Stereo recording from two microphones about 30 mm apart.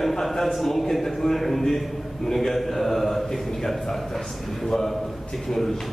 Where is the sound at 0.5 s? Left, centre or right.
Centre.